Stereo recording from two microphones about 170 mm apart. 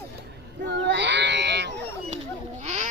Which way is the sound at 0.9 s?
90° right.